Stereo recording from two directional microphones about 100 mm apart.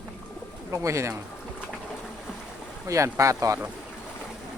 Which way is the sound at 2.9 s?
30° right (ahead or behind).